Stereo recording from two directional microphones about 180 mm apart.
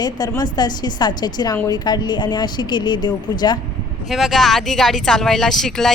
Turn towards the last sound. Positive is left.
turn(degrees=0)  # may be behind; listen again after turning